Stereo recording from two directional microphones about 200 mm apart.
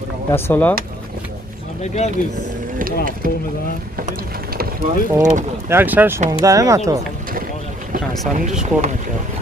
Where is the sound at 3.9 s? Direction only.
50° right (ahead or behind).